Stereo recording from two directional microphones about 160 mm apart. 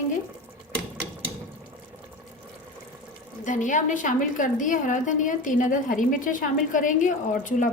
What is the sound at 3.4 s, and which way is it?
A woman's voice, 50° left (ahead or behind).